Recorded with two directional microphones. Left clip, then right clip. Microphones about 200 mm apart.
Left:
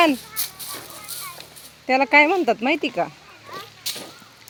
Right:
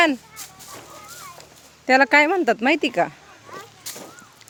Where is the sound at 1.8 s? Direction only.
25° right (ahead or behind).